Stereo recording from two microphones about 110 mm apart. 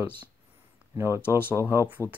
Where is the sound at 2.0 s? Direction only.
20° left (ahead or behind).